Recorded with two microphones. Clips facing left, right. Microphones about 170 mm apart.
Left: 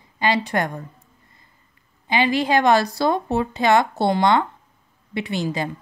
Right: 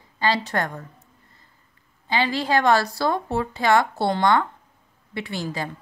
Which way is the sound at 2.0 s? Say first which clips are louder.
Left 3 dB; 15° left (ahead or behind).